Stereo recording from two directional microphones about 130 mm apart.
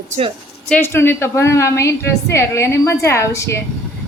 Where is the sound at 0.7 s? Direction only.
20° left (ahead or behind).